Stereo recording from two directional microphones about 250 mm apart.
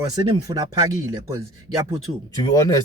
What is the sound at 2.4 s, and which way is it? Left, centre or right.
Speech, centre.